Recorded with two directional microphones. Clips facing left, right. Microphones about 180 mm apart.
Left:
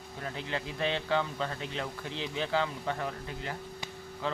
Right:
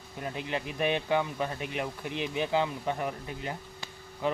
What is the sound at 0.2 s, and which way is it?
Speech, 20° right (ahead or behind).